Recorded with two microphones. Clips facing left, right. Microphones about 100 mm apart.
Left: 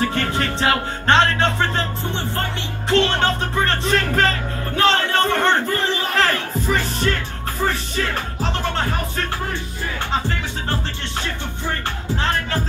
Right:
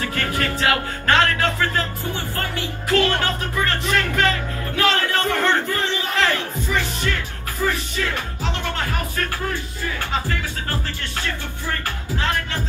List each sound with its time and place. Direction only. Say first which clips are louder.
0.1 s music: left 2 dB; 25° left (ahead or behind)
2.9 s music: left 2 dB; 30° left (ahead or behind)
4.7 s a sound: left 3 dB; 30° left (ahead or behind)
6.1 s music: even; 35° left (ahead or behind)
12.2 s music: left 1 dB; 35° left (ahead or behind)